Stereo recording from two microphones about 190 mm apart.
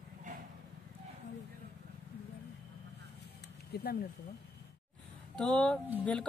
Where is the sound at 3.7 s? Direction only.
55° left (ahead or behind).